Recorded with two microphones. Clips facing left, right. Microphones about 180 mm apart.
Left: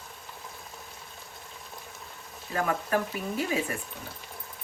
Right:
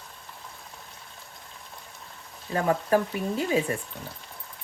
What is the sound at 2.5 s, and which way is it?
Speech, 30° right (ahead or behind).